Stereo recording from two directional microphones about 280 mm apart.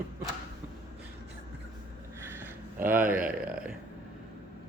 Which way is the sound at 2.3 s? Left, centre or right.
Centre.